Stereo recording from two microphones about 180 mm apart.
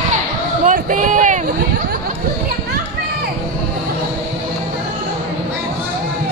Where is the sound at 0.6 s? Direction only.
45° right (ahead or behind).